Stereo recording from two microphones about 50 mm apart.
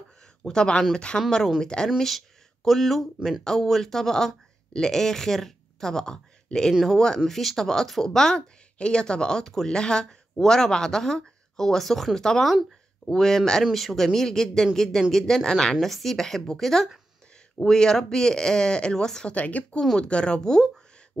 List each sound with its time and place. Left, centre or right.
0.4 s speech: centre
2.0 s speech: centre
19.3 s speech: left